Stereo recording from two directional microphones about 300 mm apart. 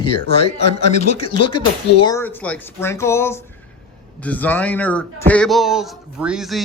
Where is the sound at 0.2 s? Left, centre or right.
Centre.